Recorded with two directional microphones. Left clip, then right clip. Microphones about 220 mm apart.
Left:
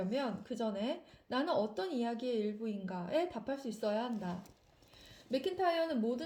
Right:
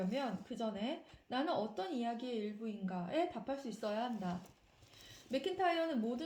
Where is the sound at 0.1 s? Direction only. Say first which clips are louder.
Left 3 dB; 45° left (ahead or behind).